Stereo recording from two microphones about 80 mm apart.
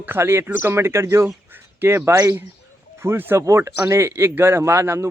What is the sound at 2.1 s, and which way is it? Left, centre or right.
Speech, right.